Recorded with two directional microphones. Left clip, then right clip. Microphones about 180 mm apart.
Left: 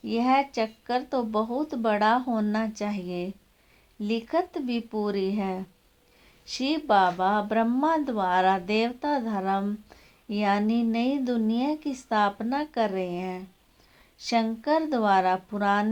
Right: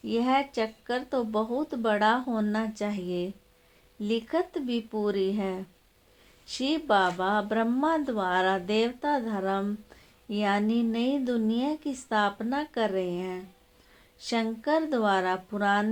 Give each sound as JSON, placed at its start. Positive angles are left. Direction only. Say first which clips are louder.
{"t": 0.0, "sound": "speech", "louder": "left 2 dB", "side_deg": 40}